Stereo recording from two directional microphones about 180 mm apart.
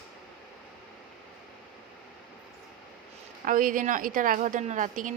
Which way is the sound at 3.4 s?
50° right (ahead or behind).